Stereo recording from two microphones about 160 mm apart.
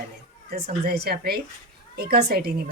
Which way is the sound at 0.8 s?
85° right.